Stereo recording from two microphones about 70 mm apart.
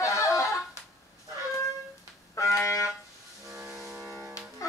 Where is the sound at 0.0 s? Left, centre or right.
Left.